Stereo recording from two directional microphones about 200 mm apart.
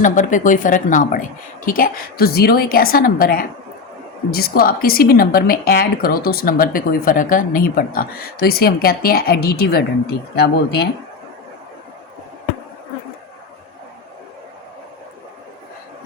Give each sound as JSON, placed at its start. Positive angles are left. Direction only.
{"t": 0.0, "sound": "a woman's voice", "side_deg": 40}